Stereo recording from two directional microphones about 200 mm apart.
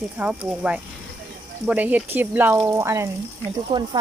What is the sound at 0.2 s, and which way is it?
Speech, 5° right (ahead or behind).